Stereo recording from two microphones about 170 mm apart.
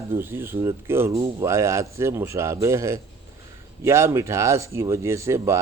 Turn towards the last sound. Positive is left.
turn(degrees=-15)  # may be behind; listen again after turning